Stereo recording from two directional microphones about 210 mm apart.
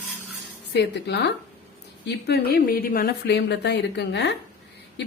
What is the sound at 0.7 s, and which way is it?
Speech, 55° left (ahead or behind).